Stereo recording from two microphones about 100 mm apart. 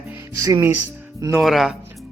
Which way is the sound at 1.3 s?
Centre (ahead or behind).